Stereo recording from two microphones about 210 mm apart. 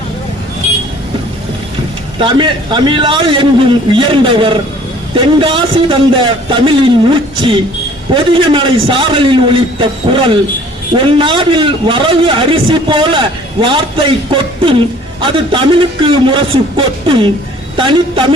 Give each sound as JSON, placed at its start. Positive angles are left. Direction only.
{"t": 2.1, "sound": "a man's voice", "side_deg": -25}
{"t": 15.2, "sound": "a man's voice", "side_deg": -25}